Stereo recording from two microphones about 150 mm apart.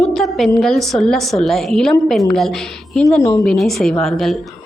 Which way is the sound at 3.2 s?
20° left (ahead or behind).